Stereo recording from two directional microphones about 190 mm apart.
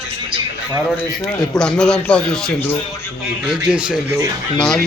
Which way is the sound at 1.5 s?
5° left (ahead or behind).